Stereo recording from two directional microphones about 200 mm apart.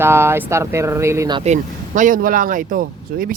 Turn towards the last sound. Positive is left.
turn(degrees=-45)  # may be behind; listen again after turning